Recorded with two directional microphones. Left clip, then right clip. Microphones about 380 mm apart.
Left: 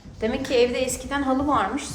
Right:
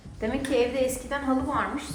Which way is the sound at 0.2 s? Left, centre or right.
Centre.